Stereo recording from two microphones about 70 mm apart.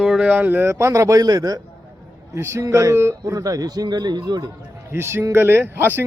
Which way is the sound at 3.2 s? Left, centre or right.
Right.